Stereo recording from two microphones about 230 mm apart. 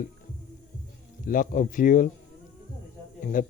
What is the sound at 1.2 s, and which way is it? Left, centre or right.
Speech, left.